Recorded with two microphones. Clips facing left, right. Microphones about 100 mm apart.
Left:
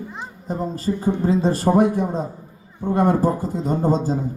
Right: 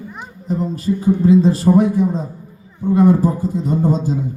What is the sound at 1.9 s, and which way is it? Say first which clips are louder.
A man's voice: right 4 dB; 60° left (ahead or behind).